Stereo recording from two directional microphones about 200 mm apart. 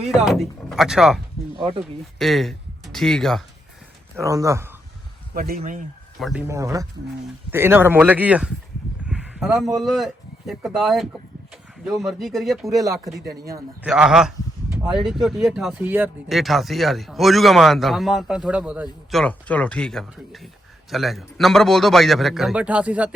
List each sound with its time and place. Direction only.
0.1 s speech: centre (ahead or behind)
1.5 s speech: 25° right (ahead or behind)
2.1 s speech: centre (ahead or behind)
4.2 s speech: 15° right (ahead or behind)
5.3 s speech: 45° right (ahead or behind)
6.1 s speech: centre (ahead or behind)
6.5 s speech: 15° right (ahead or behind); by 12.5 s centre (ahead or behind)
12.6 s speech: 15° right (ahead or behind)
13.8 s speech: 5° right (ahead or behind)
19.2 s speech: 5° left (ahead or behind)